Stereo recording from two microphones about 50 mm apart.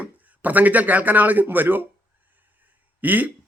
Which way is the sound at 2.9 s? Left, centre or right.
Right.